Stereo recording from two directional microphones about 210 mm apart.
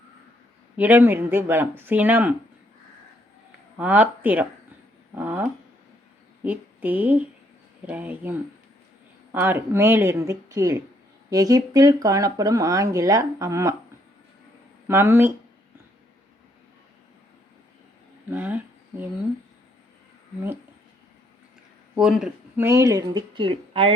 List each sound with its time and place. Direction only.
0.8 s speech: 10° right (ahead or behind)
3.8 s a woman's voice: 10° right (ahead or behind)
14.8 s speech: 10° right (ahead or behind)
18.3 s a sound: 10° right (ahead or behind)
21.9 s speech: centre (ahead or behind); by 23.9 s 25° right (ahead or behind)